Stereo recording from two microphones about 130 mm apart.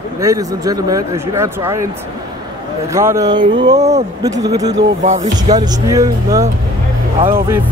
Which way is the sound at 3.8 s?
55° right (ahead or behind).